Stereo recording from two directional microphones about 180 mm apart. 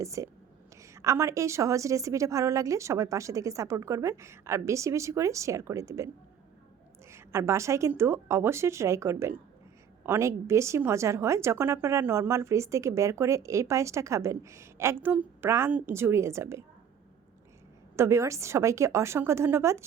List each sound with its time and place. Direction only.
0.0 s a woman's voice: 15° right (ahead or behind)
7.1 s a woman's voice: 15° right (ahead or behind)
17.9 s a woman's voice: 15° right (ahead or behind)